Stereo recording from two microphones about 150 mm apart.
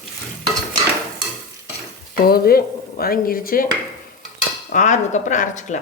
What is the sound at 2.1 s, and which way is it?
Dishes, 85° left.